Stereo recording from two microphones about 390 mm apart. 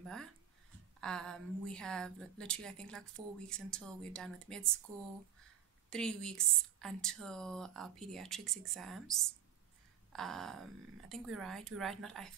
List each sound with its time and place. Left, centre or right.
0.0 s a woman's voice: centre
5.9 s a woman's voice: centre